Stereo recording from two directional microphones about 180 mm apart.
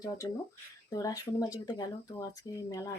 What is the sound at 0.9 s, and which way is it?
Speech, 20° left (ahead or behind).